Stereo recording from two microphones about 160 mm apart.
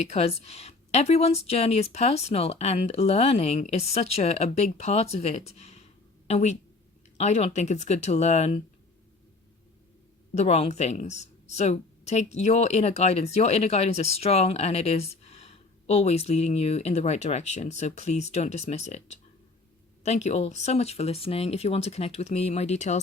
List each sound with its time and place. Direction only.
0.0 s a woman's voice: 40° left (ahead or behind)
10.3 s speech: 40° left (ahead or behind)